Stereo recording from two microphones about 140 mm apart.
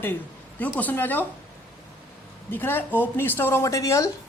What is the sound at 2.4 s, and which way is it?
Speech, 15° left (ahead or behind).